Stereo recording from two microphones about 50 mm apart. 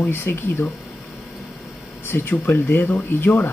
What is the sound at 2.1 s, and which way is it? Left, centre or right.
Speech, left.